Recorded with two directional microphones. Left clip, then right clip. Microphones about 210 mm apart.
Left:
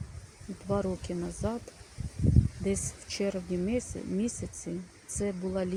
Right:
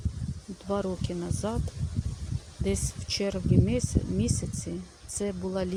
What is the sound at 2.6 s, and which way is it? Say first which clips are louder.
Speech: right 1 dB; centre (ahead or behind).